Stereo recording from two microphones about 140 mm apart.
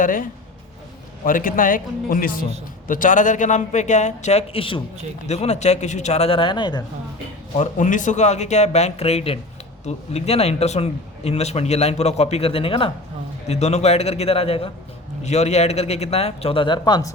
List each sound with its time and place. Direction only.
0.0 s speech: 75° left (ahead or behind); by 2.5 s 90° left
2.8 s a man's voice: 70° left (ahead or behind); by 4.8 s 40° left (ahead or behind)
5.3 s speech: 50° left (ahead or behind); by 6.8 s 30° left (ahead or behind)
7.5 s a man's voice: 60° left (ahead or behind); by 12.9 s 40° left (ahead or behind)
13.5 s speech: 50° left (ahead or behind); by 17.1 s 30° left (ahead or behind)